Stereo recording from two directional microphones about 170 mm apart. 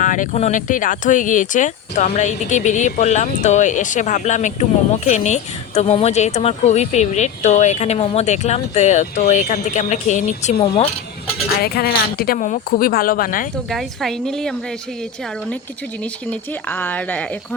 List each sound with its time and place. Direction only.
0.0 s speech: 50° left (ahead or behind)
11.6 s a woman's voice: 65° left (ahead or behind)
13.7 s a woman's voice: centre (ahead or behind)
16.3 s speech: 10° left (ahead or behind)